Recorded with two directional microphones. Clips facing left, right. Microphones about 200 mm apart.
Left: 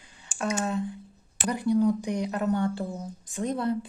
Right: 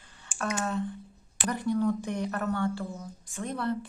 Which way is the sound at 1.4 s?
10° left (ahead or behind).